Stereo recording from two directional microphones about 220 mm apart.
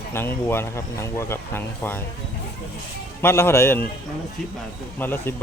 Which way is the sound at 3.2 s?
10° left (ahead or behind).